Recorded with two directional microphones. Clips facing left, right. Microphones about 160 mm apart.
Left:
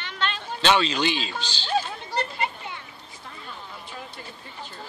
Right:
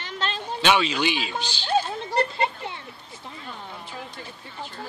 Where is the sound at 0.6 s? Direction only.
10° right (ahead or behind).